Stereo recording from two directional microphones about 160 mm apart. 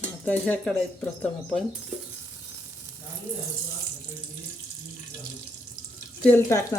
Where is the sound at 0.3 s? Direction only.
10° left (ahead or behind).